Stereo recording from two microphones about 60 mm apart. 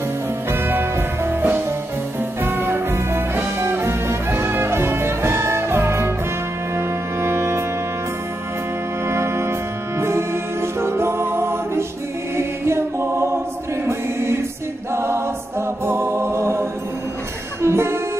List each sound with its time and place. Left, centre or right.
0.5 s music: right
7.2 s music: right
9.1 s music: right
12.4 s choir: right
15.0 s a capella: right
15.8 s music: right